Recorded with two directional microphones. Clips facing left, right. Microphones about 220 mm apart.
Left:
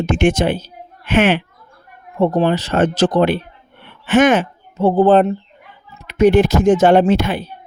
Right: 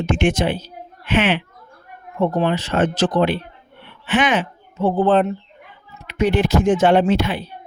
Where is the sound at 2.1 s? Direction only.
35° left (ahead or behind).